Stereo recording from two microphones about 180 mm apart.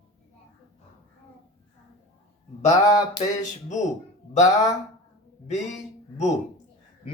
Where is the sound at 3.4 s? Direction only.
40° left (ahead or behind).